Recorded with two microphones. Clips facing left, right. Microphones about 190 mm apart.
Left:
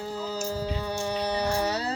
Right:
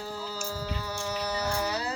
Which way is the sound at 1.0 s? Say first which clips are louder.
Left 3 dB; 30° left (ahead or behind).